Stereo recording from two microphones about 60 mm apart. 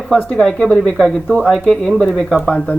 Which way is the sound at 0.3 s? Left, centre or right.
Centre.